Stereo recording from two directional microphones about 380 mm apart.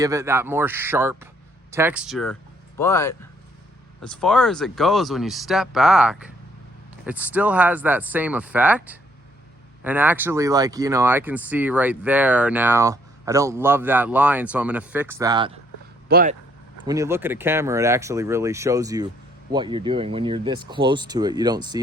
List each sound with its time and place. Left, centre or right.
0.0 s speech: centre
16.0 s speech: right
16.8 s speech: centre